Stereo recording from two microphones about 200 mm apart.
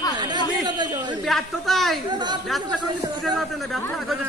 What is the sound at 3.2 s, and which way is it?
A man's voice, centre (ahead or behind).